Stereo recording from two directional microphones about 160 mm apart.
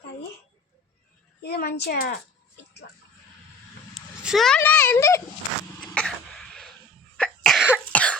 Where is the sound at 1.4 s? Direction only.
80° left.